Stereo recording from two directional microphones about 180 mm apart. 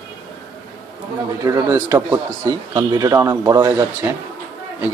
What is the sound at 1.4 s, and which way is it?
Speech, 15° right (ahead or behind).